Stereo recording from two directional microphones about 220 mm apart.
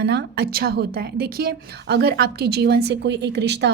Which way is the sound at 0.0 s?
50° right (ahead or behind).